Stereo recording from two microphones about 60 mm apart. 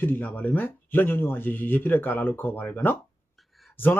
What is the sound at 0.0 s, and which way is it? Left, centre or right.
Speech, left.